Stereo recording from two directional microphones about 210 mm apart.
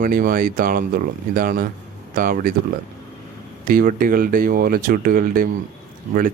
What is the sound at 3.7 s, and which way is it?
Speech, 40° right (ahead or behind).